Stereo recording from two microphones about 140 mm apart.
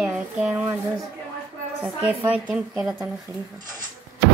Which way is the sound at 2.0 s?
10° right (ahead or behind).